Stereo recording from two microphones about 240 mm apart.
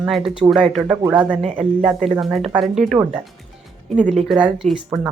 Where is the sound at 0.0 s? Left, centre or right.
Centre.